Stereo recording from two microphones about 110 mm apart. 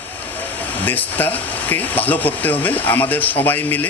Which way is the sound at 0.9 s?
15° left (ahead or behind).